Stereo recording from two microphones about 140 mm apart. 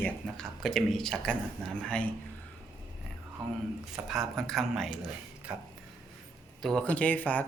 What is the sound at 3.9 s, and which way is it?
Speech, centre (ahead or behind).